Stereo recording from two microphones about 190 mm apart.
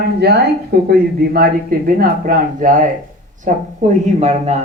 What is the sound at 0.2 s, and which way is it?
Speech, 60° right (ahead or behind).